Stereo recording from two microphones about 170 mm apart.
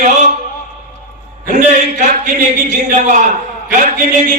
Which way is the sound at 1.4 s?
50° right (ahead or behind).